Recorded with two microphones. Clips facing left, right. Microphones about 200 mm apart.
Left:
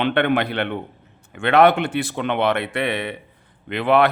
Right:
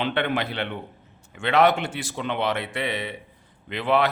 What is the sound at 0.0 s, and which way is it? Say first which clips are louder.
A man's voice: left 6 dB; 60° left (ahead or behind).